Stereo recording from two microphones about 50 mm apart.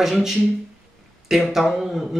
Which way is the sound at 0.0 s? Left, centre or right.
Centre.